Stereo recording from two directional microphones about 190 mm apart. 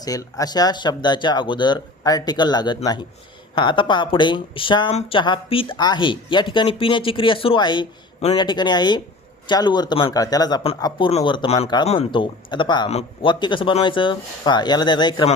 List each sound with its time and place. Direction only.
0.0 s speech: 20° left (ahead or behind)